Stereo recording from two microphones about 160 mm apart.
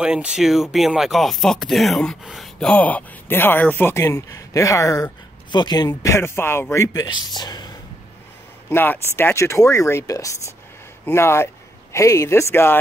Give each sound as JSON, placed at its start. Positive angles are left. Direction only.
{"t": 0.0, "sound": "speech", "side_deg": -5}
{"t": 8.6, "sound": "speech", "side_deg": 15}